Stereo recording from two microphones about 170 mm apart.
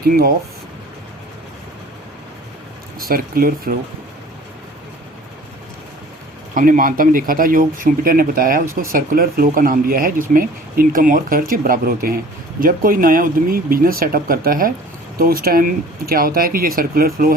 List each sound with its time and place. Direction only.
0.0 s speech: 60° right (ahead or behind)
3.0 s speech: 60° right (ahead or behind)
6.5 s speech: 55° right (ahead or behind)